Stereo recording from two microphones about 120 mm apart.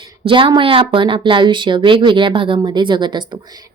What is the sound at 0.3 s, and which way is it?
A woman's voice, 45° right (ahead or behind).